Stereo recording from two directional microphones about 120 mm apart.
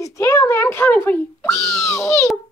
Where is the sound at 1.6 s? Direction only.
25° left (ahead or behind).